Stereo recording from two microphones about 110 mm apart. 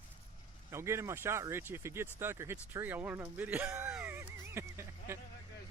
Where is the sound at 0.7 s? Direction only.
25° right (ahead or behind).